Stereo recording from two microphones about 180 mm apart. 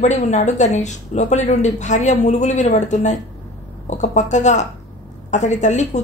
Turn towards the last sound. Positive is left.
turn(degrees=40)  # may be behind; listen again after turning